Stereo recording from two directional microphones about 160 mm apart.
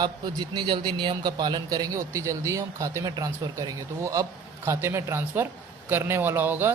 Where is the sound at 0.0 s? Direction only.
25° right (ahead or behind).